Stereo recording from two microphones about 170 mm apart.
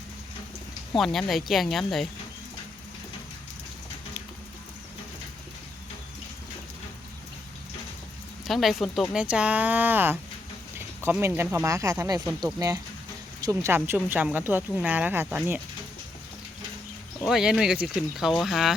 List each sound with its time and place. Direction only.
0.9 s speech: centre (ahead or behind)
8.4 s speech: centre (ahead or behind)
17.2 s speech: 5° right (ahead or behind)